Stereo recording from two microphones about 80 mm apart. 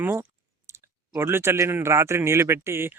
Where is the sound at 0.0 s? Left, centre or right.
Right.